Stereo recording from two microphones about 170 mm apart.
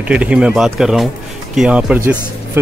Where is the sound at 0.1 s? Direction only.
5° right (ahead or behind).